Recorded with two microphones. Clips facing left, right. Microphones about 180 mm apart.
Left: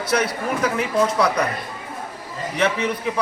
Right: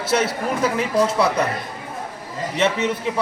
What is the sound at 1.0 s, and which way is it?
Speech, 35° right (ahead or behind).